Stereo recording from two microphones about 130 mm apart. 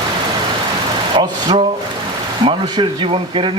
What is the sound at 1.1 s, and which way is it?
Speech, 35° right (ahead or behind).